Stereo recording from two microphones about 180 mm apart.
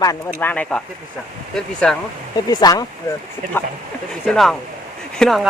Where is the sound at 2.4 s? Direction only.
20° left (ahead or behind).